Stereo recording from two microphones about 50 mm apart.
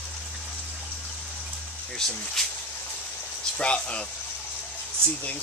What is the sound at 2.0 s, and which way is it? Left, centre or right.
Speech, centre.